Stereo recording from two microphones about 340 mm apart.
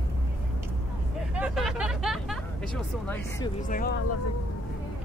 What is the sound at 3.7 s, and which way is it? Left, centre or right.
Speech, left.